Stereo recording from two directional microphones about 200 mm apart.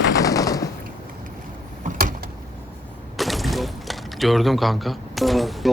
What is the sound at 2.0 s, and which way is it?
Vehicle, 45° right (ahead or behind).